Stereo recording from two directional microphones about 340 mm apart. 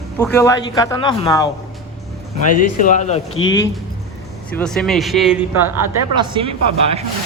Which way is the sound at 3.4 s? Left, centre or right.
Left.